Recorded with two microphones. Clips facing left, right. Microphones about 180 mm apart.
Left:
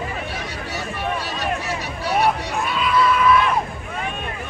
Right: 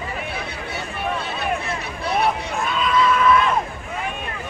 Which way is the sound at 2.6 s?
5° left (ahead or behind).